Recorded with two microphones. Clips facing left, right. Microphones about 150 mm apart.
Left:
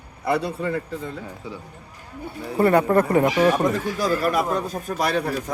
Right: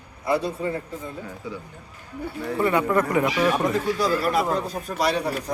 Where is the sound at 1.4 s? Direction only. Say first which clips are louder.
Right 3 dB; 25° left (ahead or behind).